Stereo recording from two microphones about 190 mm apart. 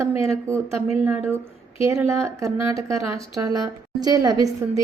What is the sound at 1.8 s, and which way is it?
A woman's voice, 15° right (ahead or behind).